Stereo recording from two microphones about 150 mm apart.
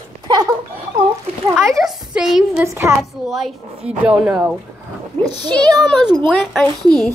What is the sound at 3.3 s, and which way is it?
A woman's voice, 5° right (ahead or behind).